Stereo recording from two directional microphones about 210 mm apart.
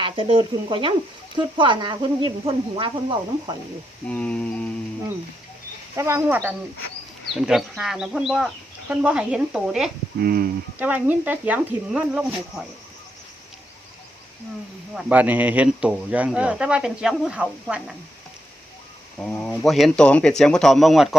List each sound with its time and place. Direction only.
0.0 s speech: 25° right (ahead or behind)
4.1 s speech: 5° left (ahead or behind)
6.0 s speech: 10° right (ahead or behind)
10.2 s speech: 45° right (ahead or behind)
10.8 s speech: 10° right (ahead or behind)
14.9 s speech: 10° right (ahead or behind)
19.2 s speech: 5° left (ahead or behind)